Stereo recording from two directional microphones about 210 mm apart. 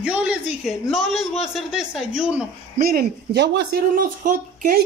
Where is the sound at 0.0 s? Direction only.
5° right (ahead or behind).